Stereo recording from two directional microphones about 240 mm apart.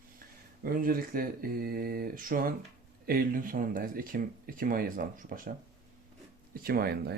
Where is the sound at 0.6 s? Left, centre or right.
Right.